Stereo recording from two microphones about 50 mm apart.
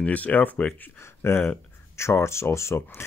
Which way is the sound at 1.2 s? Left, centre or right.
Left.